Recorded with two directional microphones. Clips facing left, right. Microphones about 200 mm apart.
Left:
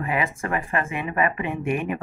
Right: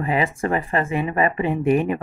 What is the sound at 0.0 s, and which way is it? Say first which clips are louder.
Speech: right 4 dB; 30° right (ahead or behind).